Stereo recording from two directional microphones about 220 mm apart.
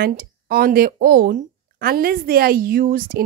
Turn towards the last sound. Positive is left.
turn(degrees=-40)  # may be behind; listen again after turning